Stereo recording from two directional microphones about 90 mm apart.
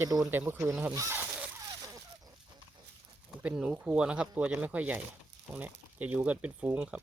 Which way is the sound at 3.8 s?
10° right (ahead or behind).